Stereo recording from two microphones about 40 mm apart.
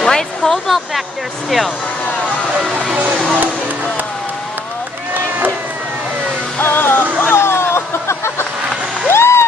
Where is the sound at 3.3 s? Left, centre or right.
Right.